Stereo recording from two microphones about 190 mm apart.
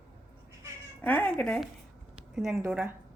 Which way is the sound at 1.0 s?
10° left (ahead or behind).